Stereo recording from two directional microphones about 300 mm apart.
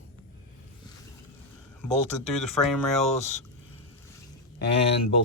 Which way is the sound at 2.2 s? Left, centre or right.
Centre.